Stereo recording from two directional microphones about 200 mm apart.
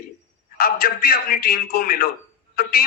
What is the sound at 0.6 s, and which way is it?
A man's voice, 50° left (ahead or behind).